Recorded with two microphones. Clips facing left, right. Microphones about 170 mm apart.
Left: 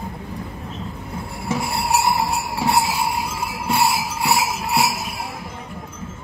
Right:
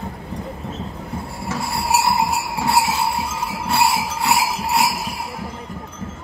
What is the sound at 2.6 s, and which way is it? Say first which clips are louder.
Jingle bell: right 1 dB; 15° left (ahead or behind).